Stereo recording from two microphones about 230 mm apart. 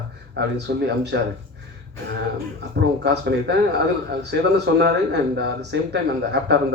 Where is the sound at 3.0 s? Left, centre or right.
Right.